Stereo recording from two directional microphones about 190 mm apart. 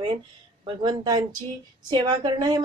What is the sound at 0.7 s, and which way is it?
A woman's voice, 20° right (ahead or behind).